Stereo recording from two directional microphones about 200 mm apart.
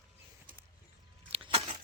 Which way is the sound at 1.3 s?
30° right (ahead or behind).